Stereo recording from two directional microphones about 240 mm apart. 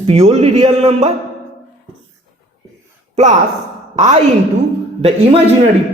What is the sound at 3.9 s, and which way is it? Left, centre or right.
Speech, right.